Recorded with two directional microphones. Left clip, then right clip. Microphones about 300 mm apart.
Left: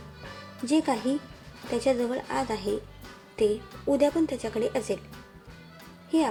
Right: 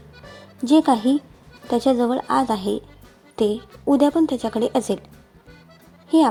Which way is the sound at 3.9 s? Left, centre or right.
Centre.